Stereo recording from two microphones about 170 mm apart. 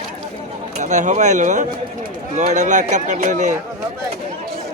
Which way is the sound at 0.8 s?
45° right (ahead or behind).